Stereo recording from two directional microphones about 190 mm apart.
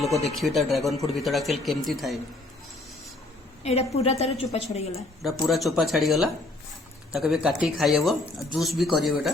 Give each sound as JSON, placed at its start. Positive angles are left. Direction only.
{"t": 0.0, "sound": "speech", "side_deg": 0}
{"t": 3.6, "sound": "a woman's voice", "side_deg": 35}
{"t": 4.9, "sound": "speech", "side_deg": 0}